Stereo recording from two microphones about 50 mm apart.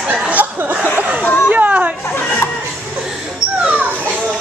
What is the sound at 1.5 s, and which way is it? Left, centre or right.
Chatter, right.